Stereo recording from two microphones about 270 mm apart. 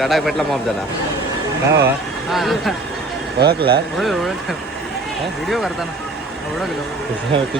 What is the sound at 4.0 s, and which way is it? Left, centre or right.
Speech, centre.